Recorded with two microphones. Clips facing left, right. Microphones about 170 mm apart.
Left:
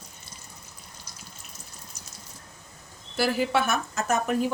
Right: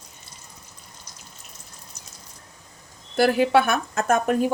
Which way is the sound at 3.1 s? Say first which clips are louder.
Right 7 dB; 55° right (ahead or behind).